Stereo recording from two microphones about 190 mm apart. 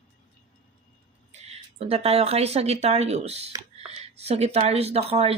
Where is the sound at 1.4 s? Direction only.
35° right (ahead or behind).